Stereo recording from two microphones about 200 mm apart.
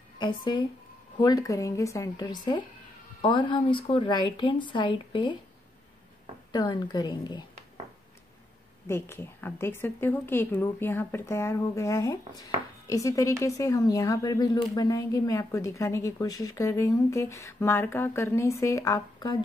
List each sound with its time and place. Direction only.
1.1 s a woman's voice: 20° left (ahead or behind)
6.5 s a woman's voice: 20° left (ahead or behind)
8.8 s speech: 10° left (ahead or behind)